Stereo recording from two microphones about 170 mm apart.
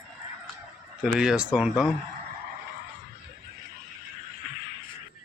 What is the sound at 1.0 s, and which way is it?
Speech, 5° right (ahead or behind).